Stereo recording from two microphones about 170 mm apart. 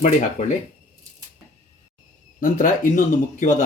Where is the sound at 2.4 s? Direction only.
50° left (ahead or behind).